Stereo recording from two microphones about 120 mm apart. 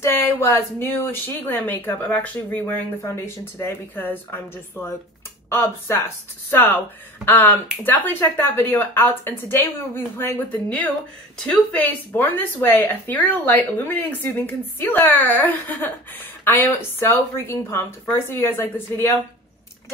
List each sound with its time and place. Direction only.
0.0 s speech: 20° left (ahead or behind)